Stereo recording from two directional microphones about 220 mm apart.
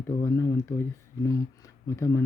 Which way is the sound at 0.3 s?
15° left (ahead or behind).